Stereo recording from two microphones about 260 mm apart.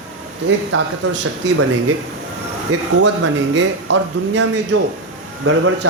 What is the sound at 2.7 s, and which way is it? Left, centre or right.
Speech, right.